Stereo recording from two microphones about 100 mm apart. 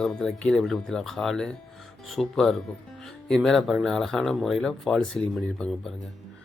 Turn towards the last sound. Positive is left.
turn(degrees=5)  # may be behind; listen again after turning